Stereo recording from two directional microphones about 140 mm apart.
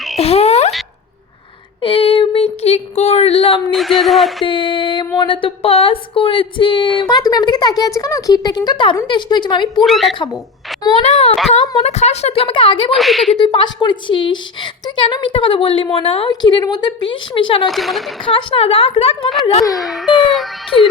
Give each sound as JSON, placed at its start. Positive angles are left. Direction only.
{"t": 0.2, "sound": "a sound", "side_deg": 45}
{"t": 1.8, "sound": "a sound", "side_deg": 40}
{"t": 3.7, "sound": "baby cry", "side_deg": 0}
{"t": 4.4, "sound": "speech", "side_deg": 35}
{"t": 9.8, "sound": "baby cry", "side_deg": 0}
{"t": 10.9, "sound": "a woman's voice", "side_deg": 50}
{"t": 12.9, "sound": "baby cry", "side_deg": 0}
{"t": 13.4, "sound": "speech", "side_deg": 35}
{"t": 17.7, "sound": "baby cry", "side_deg": 0}
{"t": 18.3, "sound": "a woman's voice", "side_deg": 40}
{"t": 19.7, "sound": "baby cry", "side_deg": 0}